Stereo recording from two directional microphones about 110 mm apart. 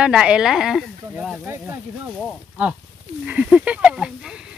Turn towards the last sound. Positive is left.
turn(degrees=-10)  # may be behind; listen again after turning